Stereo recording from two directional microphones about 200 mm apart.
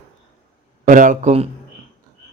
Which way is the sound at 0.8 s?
40° right (ahead or behind).